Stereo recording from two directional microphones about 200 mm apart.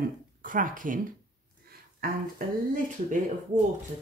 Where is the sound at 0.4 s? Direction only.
40° right (ahead or behind).